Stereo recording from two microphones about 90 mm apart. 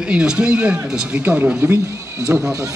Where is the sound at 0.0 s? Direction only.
10° right (ahead or behind).